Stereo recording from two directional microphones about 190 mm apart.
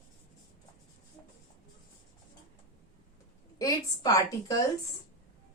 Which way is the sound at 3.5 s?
20° left (ahead or behind).